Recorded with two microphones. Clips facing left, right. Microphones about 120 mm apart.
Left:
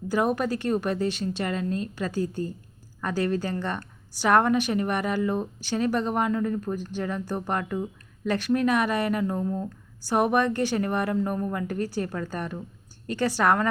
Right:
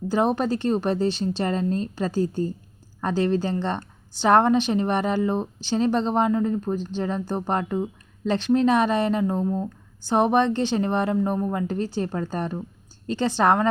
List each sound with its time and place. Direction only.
0.1 s a woman's voice: 25° right (ahead or behind)